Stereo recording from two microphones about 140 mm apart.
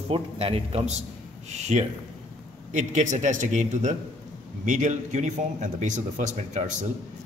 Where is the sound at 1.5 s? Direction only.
55° right (ahead or behind).